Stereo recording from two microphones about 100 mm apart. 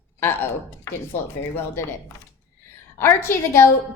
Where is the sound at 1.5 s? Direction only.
25° left (ahead or behind).